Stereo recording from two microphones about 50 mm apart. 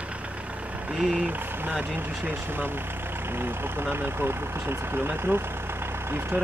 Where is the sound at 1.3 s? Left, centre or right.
Right.